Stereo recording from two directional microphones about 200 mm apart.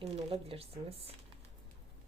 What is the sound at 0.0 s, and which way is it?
Speech, 30° right (ahead or behind).